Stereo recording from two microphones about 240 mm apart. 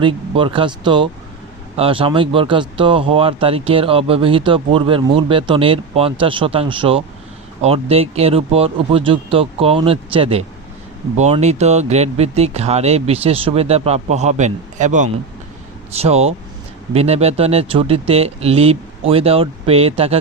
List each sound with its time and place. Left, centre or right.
0.0 s speech: right